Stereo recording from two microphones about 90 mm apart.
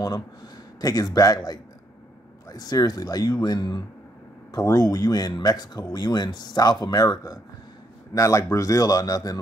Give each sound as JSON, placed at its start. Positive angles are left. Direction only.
{"t": 0.7, "sound": "speech", "side_deg": 45}